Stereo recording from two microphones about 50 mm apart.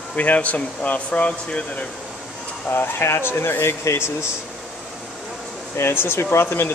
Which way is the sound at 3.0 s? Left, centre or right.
Left.